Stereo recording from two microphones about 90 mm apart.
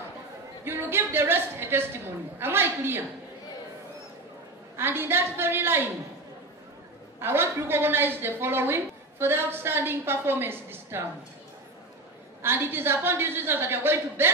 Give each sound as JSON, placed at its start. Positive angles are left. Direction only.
{"t": 0.7, "sound": "a woman's voice", "side_deg": -25}
{"t": 4.7, "sound": "a woman's voice", "side_deg": -25}
{"t": 7.2, "sound": "a woman's voice", "side_deg": -25}
{"t": 12.4, "sound": "a woman's voice", "side_deg": -25}